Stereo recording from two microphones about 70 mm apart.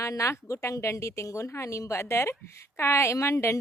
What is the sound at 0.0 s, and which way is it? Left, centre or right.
A woman's voice, left.